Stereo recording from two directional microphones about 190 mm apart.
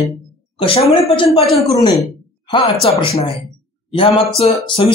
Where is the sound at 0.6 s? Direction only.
25° left (ahead or behind).